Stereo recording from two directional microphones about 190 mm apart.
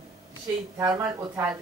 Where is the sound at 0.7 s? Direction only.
20° right (ahead or behind).